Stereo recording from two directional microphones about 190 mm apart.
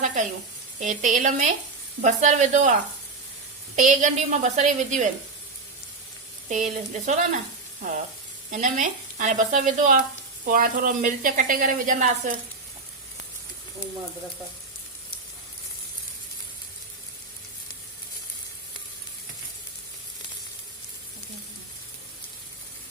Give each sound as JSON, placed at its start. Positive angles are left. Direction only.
{"t": 0.0, "sound": "sizzle", "side_deg": -40}
{"t": 0.8, "sound": "a woman's voice", "side_deg": -40}
{"t": 3.8, "sound": "a woman's voice", "side_deg": -40}
{"t": 6.5, "sound": "a woman's voice", "side_deg": -40}
{"t": 8.4, "sound": "speech", "side_deg": -40}